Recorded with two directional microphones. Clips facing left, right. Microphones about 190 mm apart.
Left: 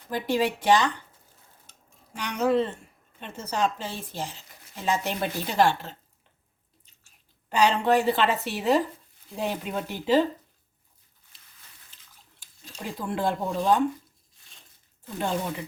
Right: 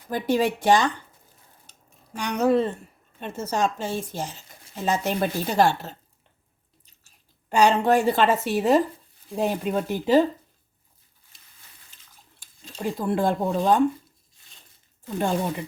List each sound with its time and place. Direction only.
0.1 s a woman's voice: 45° right (ahead or behind)
2.1 s a woman's voice: 45° right (ahead or behind)
7.5 s a woman's voice: 45° right (ahead or behind)
12.8 s a woman's voice: 45° right (ahead or behind)